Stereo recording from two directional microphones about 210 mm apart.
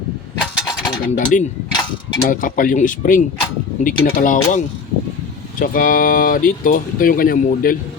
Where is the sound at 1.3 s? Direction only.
40° left (ahead or behind).